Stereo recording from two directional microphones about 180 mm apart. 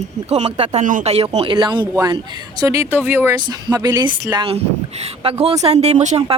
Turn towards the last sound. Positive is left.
turn(degrees=-40)  # may be behind; listen again after turning